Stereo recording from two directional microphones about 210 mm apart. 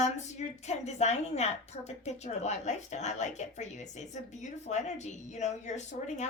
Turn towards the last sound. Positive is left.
turn(degrees=35)  # may be behind; listen again after turning